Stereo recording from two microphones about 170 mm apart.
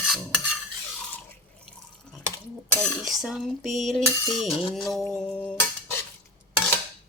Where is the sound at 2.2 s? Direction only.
10° left (ahead or behind).